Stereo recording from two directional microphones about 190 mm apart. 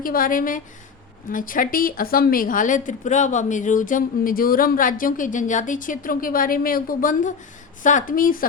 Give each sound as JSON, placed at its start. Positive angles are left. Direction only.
{"t": 0.0, "sound": "a woman's voice", "side_deg": 45}